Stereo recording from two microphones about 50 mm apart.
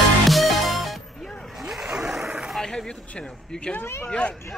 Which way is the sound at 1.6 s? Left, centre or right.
Centre.